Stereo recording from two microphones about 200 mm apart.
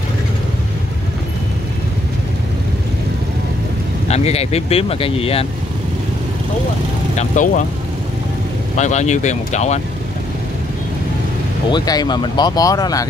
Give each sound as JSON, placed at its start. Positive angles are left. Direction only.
{"t": 4.1, "sound": "speech", "side_deg": 30}
{"t": 7.2, "sound": "speech", "side_deg": 40}
{"t": 8.7, "sound": "speech", "side_deg": 35}
{"t": 11.7, "sound": "speech", "side_deg": 20}